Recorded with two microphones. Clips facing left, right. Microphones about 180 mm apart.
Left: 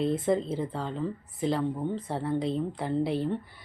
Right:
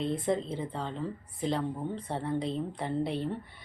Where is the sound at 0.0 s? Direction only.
5° left (ahead or behind).